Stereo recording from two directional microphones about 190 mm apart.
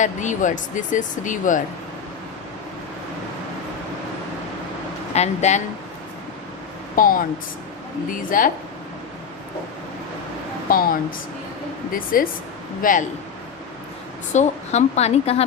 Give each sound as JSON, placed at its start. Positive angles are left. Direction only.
{"t": 0.0, "sound": "speech", "side_deg": 40}
{"t": 5.1, "sound": "speech", "side_deg": 35}
{"t": 6.9, "sound": "speech", "side_deg": 50}
{"t": 10.7, "sound": "speech", "side_deg": 50}
{"t": 14.3, "sound": "a woman's voice", "side_deg": 35}